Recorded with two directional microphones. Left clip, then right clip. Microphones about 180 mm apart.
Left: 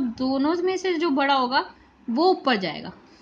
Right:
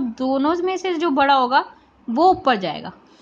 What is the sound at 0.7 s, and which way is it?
A woman's voice, 10° right (ahead or behind).